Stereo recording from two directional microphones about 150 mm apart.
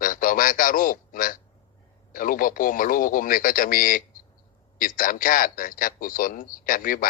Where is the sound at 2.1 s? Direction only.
65° left (ahead or behind).